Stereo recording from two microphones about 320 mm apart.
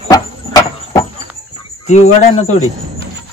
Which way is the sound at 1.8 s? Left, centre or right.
Left.